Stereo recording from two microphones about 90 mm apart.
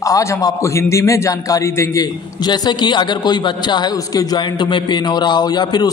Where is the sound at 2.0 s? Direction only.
50° left (ahead or behind).